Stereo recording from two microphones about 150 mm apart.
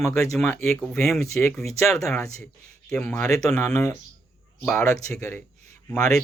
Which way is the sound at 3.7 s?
20° left (ahead or behind).